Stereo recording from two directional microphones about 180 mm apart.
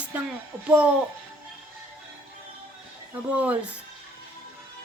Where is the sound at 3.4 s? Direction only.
10° right (ahead or behind).